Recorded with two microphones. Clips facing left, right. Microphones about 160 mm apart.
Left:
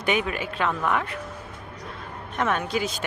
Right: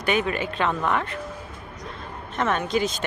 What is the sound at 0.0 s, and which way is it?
Speech, 15° left (ahead or behind).